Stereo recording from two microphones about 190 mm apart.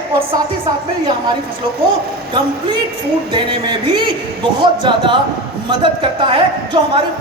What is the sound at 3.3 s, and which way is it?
A man's voice, 25° right (ahead or behind).